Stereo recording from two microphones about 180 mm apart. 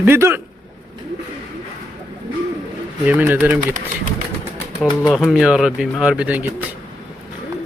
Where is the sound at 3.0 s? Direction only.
10° right (ahead or behind).